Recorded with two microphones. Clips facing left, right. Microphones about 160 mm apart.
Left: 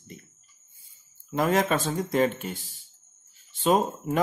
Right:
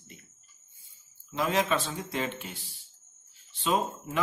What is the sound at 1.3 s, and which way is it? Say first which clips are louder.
Speech: left 4 dB; 50° left (ahead or behind).